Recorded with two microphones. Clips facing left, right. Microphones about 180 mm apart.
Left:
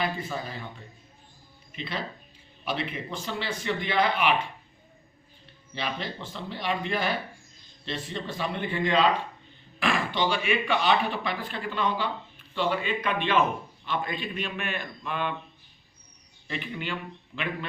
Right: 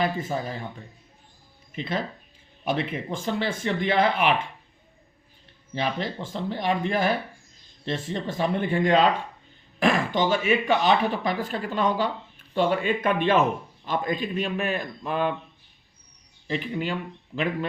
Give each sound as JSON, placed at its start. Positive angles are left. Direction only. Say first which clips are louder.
{"t": 0.0, "sound": "speech", "louder": "right 4 dB", "side_deg": -45}
{"t": 1.7, "sound": "speech", "louder": "right 5 dB", "side_deg": -45}
{"t": 5.7, "sound": "a man's voice", "louder": "right 5 dB", "side_deg": -45}
{"t": 16.5, "sound": "a man's voice", "louder": "right 6 dB", "side_deg": -35}